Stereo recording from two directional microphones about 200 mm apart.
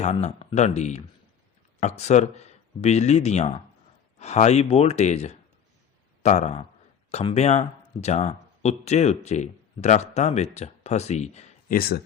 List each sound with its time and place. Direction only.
0.0 s speech: 35° left (ahead or behind)
11.8 s speech: 50° left (ahead or behind)